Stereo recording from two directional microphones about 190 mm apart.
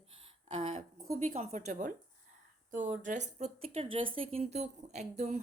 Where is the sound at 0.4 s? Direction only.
35° right (ahead or behind).